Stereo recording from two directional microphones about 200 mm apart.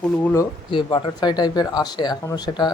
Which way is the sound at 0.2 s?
10° left (ahead or behind).